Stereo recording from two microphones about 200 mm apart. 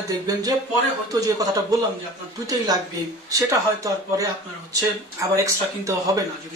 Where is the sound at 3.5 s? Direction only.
15° right (ahead or behind).